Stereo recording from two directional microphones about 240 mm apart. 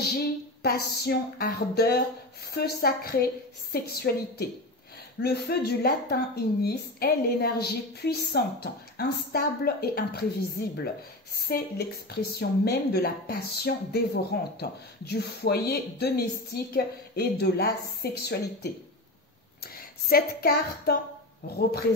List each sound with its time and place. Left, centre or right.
0.0 s a woman's voice: left
20.1 s a woman's voice: left